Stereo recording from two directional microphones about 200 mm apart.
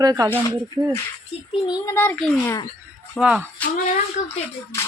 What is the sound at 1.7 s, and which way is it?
Speech, 15° left (ahead or behind).